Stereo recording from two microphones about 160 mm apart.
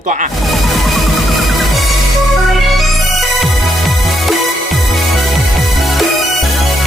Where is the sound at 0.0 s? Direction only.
55° right (ahead or behind).